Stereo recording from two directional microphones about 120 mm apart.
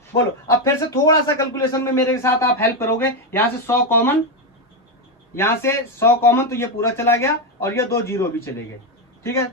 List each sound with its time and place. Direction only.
0.1 s a man's voice: 25° left (ahead or behind)
5.3 s a man's voice: 20° left (ahead or behind)